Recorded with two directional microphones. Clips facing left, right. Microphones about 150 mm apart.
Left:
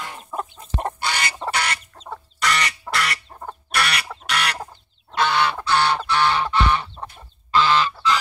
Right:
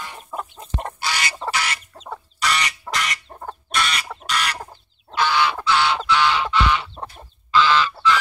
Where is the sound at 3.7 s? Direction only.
65° left (ahead or behind).